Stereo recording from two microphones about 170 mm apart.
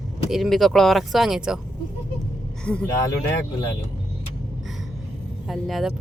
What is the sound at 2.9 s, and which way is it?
Speech, 20° left (ahead or behind).